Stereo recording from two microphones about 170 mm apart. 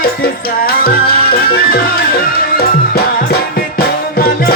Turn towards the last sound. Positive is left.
turn(degrees=60)  # may be behind; listen again after turning